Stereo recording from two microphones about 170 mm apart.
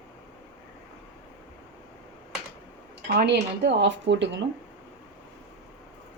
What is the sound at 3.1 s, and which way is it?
Speech, 80° right.